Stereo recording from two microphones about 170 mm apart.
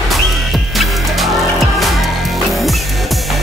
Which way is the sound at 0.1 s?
Centre (ahead or behind).